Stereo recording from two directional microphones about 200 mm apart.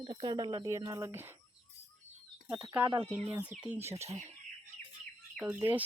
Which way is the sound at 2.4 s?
10° right (ahead or behind).